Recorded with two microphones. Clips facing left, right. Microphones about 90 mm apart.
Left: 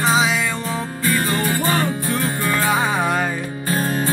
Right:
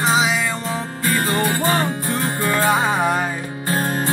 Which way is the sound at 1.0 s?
35° right (ahead or behind).